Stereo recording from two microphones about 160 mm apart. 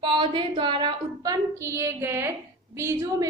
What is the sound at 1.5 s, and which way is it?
A woman's voice, 15° right (ahead or behind).